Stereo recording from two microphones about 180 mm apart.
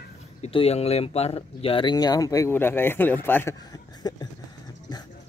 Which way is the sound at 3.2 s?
15° left (ahead or behind).